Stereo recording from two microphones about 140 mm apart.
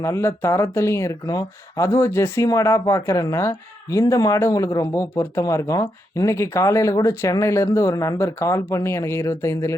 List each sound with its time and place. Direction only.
0.0 s speech: 20° left (ahead or behind)